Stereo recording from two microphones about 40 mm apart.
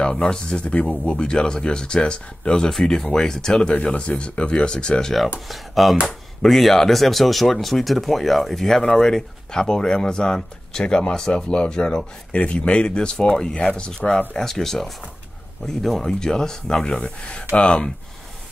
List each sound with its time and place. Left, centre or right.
0.0 s speech: centre
5.5 s speech: centre; by 14.2 s left
14.4 s speech: centre
17.0 s speech: left